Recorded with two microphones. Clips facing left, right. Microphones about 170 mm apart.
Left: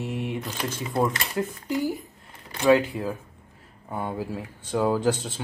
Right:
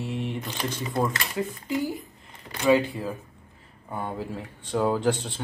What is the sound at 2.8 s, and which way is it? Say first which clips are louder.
Speech: left 1 dB; 5° left (ahead or behind).